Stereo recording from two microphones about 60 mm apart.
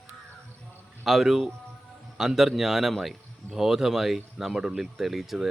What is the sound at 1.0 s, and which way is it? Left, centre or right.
Speech, centre.